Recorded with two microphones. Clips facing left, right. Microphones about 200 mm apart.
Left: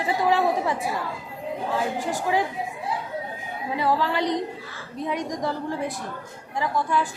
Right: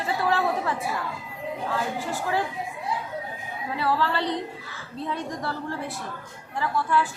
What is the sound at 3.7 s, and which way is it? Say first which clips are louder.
A woman's voice: left 2 dB; 15° left (ahead or behind).